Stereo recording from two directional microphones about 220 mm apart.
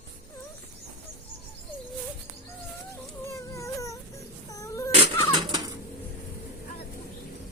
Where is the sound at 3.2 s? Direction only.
15° left (ahead or behind).